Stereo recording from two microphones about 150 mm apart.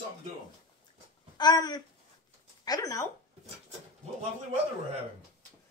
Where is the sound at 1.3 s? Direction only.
25° left (ahead or behind).